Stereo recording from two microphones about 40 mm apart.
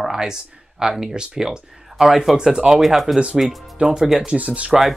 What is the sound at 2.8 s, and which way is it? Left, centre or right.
Speech, centre.